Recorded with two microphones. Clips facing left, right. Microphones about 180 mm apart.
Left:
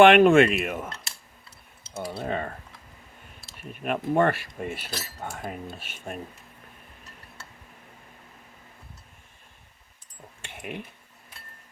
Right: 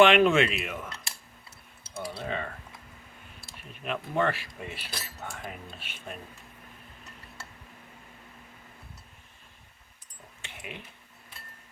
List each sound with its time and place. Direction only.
0.0 s speech: 50° left (ahead or behind)
2.0 s speech: 45° left (ahead or behind)
3.6 s speech: 50° left (ahead or behind)
10.4 s a sound: 50° left (ahead or behind)